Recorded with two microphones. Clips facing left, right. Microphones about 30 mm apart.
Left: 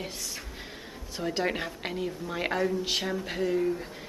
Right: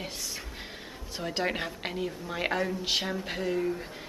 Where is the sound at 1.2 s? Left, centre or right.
Centre.